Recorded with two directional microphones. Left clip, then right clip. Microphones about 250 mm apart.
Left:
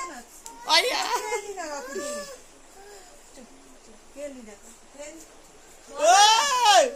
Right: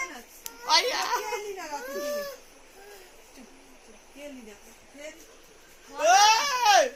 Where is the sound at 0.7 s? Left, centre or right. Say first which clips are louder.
Left 2 dB; centre.